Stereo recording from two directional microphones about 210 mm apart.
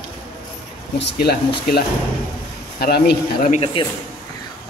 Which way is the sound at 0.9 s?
50° left (ahead or behind).